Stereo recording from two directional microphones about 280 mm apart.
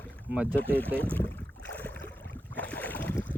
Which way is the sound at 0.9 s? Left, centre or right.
Centre.